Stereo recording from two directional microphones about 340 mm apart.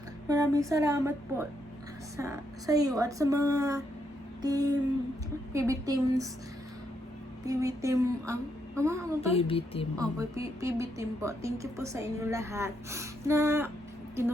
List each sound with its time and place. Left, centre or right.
0.3 s speech: centre
7.4 s speech: centre
9.3 s speech: centre
10.0 s speech: centre